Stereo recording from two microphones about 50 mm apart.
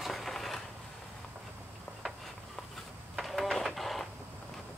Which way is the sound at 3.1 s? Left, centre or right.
Centre.